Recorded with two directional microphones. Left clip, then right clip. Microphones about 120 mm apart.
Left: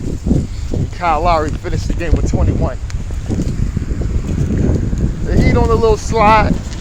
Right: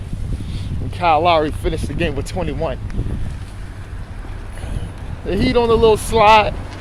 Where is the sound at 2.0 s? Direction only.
75° right (ahead or behind).